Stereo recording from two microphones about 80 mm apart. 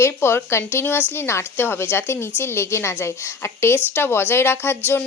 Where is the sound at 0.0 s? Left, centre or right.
Left.